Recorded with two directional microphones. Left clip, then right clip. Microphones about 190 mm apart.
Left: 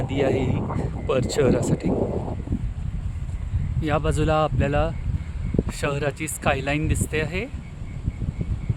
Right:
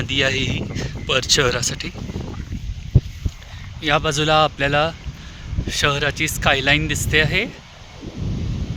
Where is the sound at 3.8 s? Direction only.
Centre (ahead or behind).